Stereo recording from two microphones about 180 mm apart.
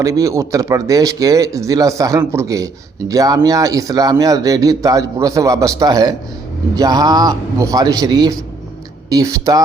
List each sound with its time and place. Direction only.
0.0 s speech: 20° right (ahead or behind)